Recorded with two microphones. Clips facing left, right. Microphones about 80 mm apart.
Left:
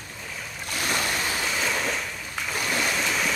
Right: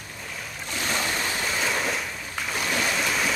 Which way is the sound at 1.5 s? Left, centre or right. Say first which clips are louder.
Right 2 dB; centre.